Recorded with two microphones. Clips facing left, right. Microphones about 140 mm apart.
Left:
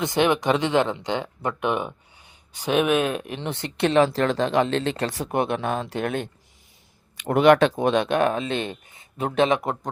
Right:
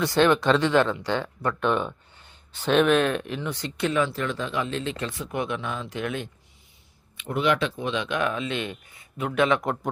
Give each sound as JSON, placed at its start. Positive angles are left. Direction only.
{"t": 0.0, "sound": "speech", "side_deg": 20}
{"t": 3.4, "sound": "speech", "side_deg": 60}
{"t": 7.3, "sound": "speech", "side_deg": 65}
{"t": 7.8, "sound": "speech", "side_deg": 50}